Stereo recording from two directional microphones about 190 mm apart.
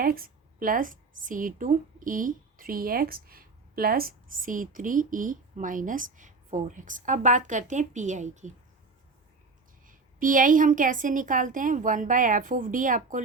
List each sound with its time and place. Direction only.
0.0 s a woman's voice: 50° right (ahead or behind)
9.8 s a woman's voice: 45° right (ahead or behind)